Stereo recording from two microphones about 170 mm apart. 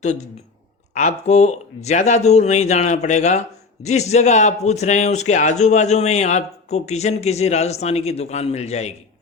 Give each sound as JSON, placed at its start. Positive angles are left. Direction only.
{"t": 0.9, "sound": "speech", "side_deg": 40}